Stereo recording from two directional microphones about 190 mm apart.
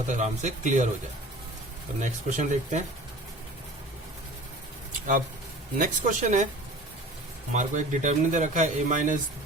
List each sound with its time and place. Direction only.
0.1 s speech: 40° right (ahead or behind)
2.0 s speech: 40° right (ahead or behind)
5.7 s speech: 45° right (ahead or behind)
7.5 s speech: 40° right (ahead or behind)